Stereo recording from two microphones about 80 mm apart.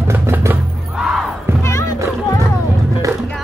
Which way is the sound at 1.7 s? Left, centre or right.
Left.